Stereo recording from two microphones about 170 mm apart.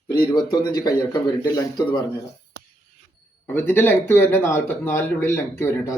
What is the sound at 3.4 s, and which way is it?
Speech, 15° left (ahead or behind).